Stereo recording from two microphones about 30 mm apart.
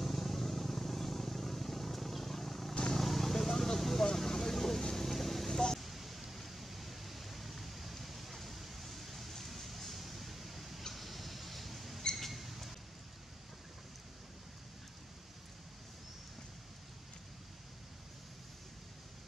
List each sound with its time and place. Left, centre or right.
0.0 s vehicle: centre
5.8 s pink noise: centre
10.9 s mouse: centre
12.3 s a sound: centre